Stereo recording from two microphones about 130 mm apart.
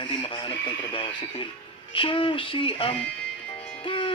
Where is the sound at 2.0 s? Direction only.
40° left (ahead or behind).